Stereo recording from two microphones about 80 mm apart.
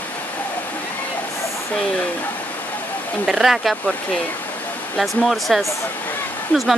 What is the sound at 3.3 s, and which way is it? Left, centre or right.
Speech, centre.